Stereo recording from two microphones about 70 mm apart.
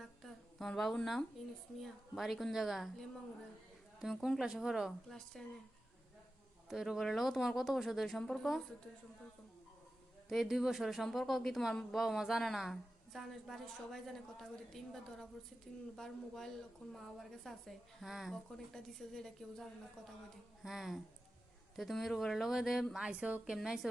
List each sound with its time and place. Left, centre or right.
0.0 s a sound: centre
1.8 s a woman's voice: centre
4.9 s a woman's voice: centre
6.7 s a woman's voice: centre
10.2 s a woman's voice: centre
23.0 s a woman's voice: centre
23.5 s speech: centre